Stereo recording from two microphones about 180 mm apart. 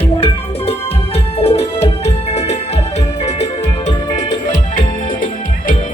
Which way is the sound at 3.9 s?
40° left (ahead or behind).